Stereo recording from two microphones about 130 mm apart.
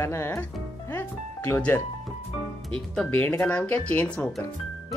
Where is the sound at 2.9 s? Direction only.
10° left (ahead or behind).